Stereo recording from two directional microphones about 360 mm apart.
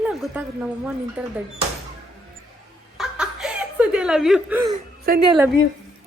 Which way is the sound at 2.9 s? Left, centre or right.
Centre.